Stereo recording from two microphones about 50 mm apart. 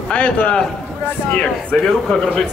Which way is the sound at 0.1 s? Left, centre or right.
Left.